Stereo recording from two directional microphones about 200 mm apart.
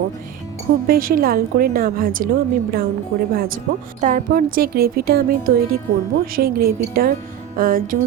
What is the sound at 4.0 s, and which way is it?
A woman's voice, 40° right (ahead or behind).